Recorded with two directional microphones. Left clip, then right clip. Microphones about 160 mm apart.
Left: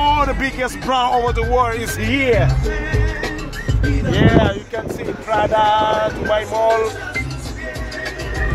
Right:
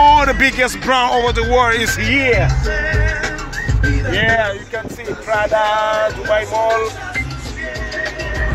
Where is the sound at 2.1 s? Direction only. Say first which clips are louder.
Even; 20° left (ahead or behind).